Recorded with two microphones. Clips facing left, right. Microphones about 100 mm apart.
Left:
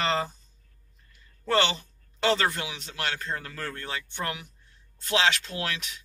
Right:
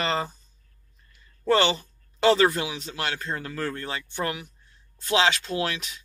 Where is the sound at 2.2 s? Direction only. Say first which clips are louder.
Right 6 dB; 10° right (ahead or behind); by 4.0 s 30° right (ahead or behind).